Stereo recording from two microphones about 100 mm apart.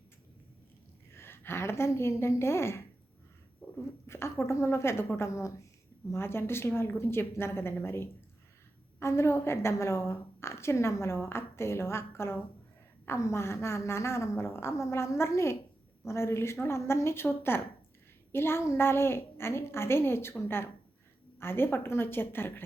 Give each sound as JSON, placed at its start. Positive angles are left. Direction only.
{"t": 1.1, "sound": "a woman's voice", "side_deg": 25}
{"t": 4.0, "sound": "a woman's voice", "side_deg": 25}